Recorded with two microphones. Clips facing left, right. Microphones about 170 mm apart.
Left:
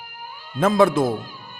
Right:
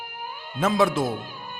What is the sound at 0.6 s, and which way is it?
Speech, 55° left (ahead or behind).